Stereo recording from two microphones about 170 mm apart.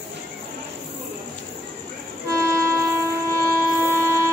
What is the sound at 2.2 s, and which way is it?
Train, 15° right (ahead or behind).